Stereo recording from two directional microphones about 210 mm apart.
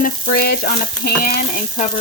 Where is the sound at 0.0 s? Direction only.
45° left (ahead or behind).